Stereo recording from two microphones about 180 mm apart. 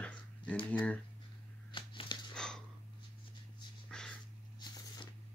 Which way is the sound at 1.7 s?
25° left (ahead or behind).